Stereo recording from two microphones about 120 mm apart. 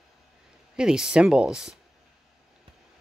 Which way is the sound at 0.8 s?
5° right (ahead or behind).